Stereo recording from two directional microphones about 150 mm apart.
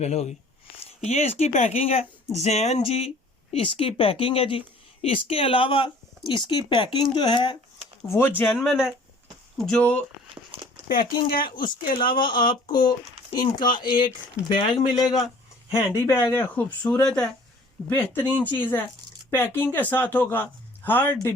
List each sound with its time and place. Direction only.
0.0 s speech: 45° left (ahead or behind); by 7.5 s 30° left (ahead or behind)
8.0 s speech: 20° left (ahead or behind)
8.4 s speech: 5° right (ahead or behind)
10.8 s speech: 75° left (ahead or behind)
11.4 s speech: 30° left (ahead or behind); by 17.2 s 5° left (ahead or behind)
17.8 s speech: 15° left (ahead or behind)